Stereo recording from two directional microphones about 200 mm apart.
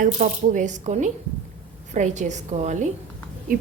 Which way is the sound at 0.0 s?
40° right (ahead or behind).